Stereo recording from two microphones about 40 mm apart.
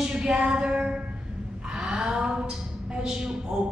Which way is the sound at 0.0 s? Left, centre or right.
Right.